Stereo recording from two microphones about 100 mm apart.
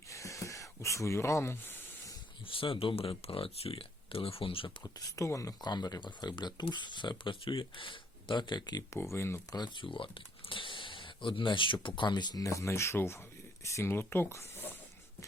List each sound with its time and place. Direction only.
0.1 s a sound: 30° left (ahead or behind)
2.5 s speech: 60° left (ahead or behind)
4.8 s speech: 35° left (ahead or behind)
9.1 s speech: 25° left (ahead or behind)
9.5 s speech: 50° left (ahead or behind); by 14.8 s 20° left (ahead or behind)